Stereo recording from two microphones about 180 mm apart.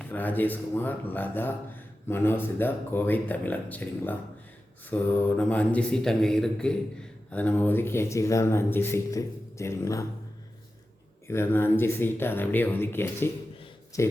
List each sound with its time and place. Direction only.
0.0 s speech: 10° left (ahead or behind)
11.3 s speech: 15° left (ahead or behind)